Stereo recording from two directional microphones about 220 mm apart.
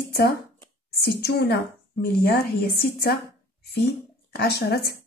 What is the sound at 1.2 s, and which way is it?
Speech, 45° left (ahead or behind).